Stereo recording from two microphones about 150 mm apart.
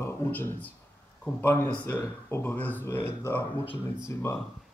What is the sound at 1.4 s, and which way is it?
Speech, 15° left (ahead or behind).